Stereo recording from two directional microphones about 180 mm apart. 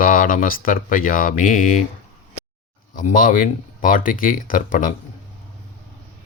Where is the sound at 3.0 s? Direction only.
50° left (ahead or behind).